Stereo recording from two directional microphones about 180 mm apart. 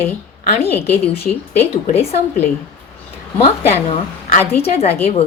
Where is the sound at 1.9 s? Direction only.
35° left (ahead or behind).